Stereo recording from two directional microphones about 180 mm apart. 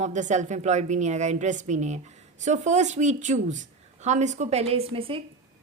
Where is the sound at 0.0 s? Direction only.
40° right (ahead or behind).